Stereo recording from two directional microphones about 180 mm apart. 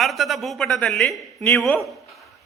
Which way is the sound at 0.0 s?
Centre (ahead or behind).